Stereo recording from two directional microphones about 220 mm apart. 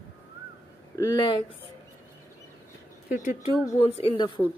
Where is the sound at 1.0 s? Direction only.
20° left (ahead or behind).